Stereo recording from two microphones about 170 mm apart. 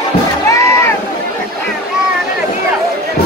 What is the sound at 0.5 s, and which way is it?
Boat, 15° left (ahead or behind).